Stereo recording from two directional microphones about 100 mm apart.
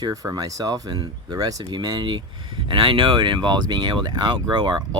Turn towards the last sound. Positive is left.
turn(degrees=-50)  # may be behind; listen again after turning